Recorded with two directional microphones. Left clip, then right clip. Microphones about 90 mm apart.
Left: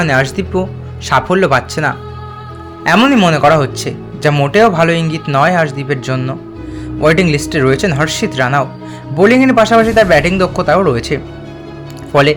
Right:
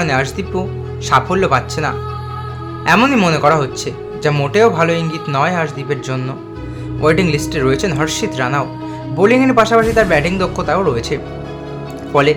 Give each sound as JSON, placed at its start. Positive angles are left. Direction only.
{"t": 0.0, "sound": "speech", "side_deg": 60}
{"t": 3.0, "sound": "speech", "side_deg": 45}
{"t": 4.4, "sound": "a man's voice", "side_deg": 55}
{"t": 7.0, "sound": "a man's voice", "side_deg": 60}